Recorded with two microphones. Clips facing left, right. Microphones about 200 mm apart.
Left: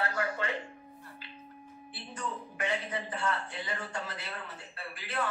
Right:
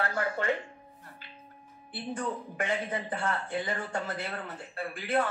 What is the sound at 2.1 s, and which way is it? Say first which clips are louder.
A man's voice: right 4 dB; 50° right (ahead or behind).